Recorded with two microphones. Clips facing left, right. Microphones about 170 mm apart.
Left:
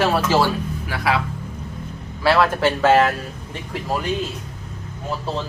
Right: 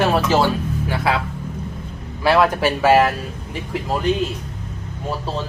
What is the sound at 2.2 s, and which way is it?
Speech, 15° right (ahead or behind).